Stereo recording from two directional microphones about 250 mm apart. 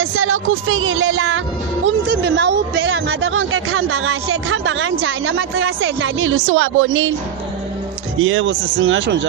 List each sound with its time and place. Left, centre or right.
0.0 s speech: right
2.2 s a sound: right
8.2 s speech: right